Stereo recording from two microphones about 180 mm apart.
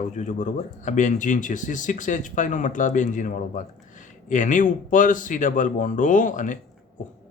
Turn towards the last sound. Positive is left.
turn(degrees=45)  # may be behind; listen again after turning